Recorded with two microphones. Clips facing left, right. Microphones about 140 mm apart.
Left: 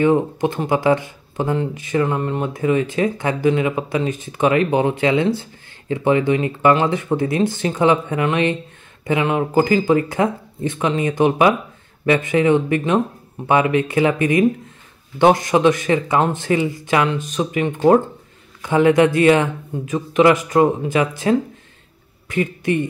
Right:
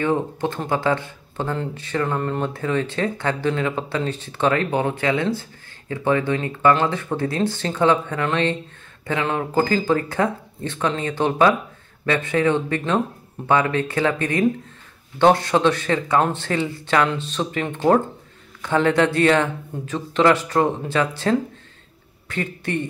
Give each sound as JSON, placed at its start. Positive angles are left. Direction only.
{"t": 0.0, "sound": "speech", "side_deg": 15}
{"t": 22.3, "sound": "speech", "side_deg": 15}